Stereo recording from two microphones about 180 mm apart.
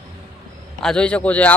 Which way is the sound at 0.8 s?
5° left (ahead or behind).